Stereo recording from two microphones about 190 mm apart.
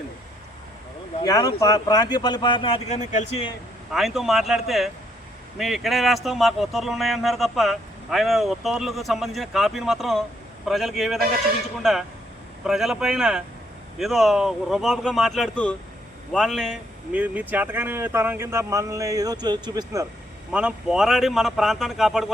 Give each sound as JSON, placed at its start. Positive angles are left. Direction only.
{"t": 1.2, "sound": "speech", "side_deg": 20}
{"t": 3.9, "sound": "speech", "side_deg": 0}
{"t": 20.5, "sound": "speech", "side_deg": -5}